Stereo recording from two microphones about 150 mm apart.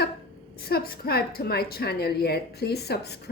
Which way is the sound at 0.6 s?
90° left.